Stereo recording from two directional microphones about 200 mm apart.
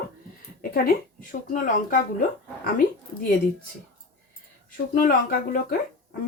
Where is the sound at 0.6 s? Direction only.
45° left (ahead or behind).